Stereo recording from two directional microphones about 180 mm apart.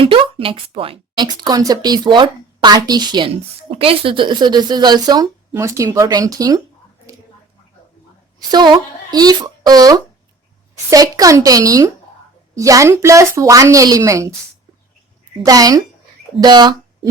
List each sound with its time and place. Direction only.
0.0 s speech: 30° right (ahead or behind)
8.4 s a woman's voice: 20° right (ahead or behind)
15.4 s speech: 20° right (ahead or behind)